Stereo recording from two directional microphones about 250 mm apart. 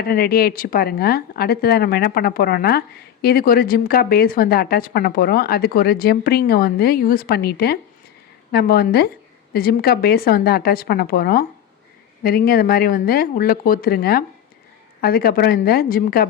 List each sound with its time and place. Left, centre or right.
0.0 s speech: left